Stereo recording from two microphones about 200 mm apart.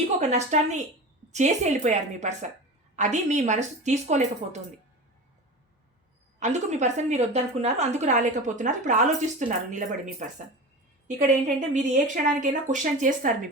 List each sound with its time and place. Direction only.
0.2 s speech: 35° right (ahead or behind)
6.4 s speech: 35° right (ahead or behind)
11.4 s speech: 40° right (ahead or behind)